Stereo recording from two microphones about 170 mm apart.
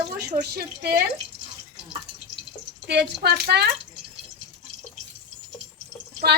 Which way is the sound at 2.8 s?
75° right (ahead or behind).